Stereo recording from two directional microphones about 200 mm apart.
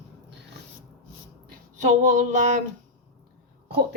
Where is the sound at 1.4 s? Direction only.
40° right (ahead or behind).